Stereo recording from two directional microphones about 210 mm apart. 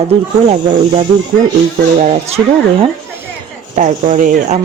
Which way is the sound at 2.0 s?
30° right (ahead or behind).